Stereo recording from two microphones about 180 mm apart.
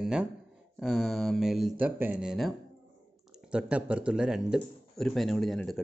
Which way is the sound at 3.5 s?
5° right (ahead or behind).